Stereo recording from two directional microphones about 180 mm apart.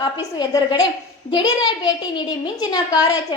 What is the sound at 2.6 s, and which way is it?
Speech, 20° left (ahead or behind).